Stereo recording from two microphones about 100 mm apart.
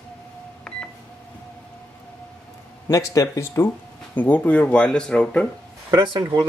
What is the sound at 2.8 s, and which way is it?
Speech, 35° left (ahead or behind).